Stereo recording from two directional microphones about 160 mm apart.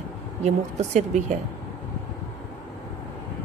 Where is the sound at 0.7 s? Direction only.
45° right (ahead or behind).